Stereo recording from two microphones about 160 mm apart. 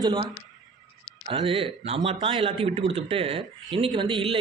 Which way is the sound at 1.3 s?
35° right (ahead or behind).